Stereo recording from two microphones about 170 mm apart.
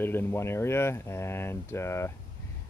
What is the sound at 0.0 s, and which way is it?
Speech, 15° left (ahead or behind).